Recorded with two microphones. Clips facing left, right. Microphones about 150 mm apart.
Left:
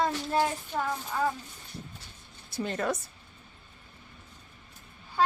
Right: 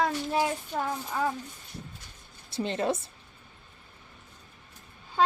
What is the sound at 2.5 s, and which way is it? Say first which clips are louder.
Speech: right 2 dB; 25° right (ahead or behind).